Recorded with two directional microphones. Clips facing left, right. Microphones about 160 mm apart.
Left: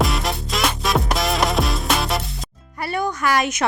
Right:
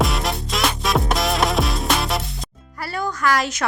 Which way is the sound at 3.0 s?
20° left (ahead or behind).